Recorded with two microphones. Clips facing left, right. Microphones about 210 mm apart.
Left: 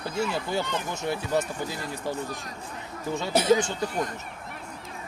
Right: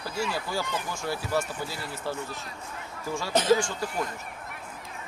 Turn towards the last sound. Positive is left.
turn(degrees=20)  # may be behind; listen again after turning